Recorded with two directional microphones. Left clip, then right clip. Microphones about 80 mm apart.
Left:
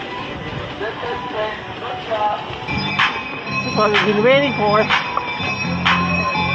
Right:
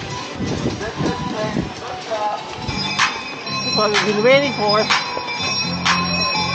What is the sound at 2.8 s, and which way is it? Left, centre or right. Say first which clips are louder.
Music: left 1 dB; right.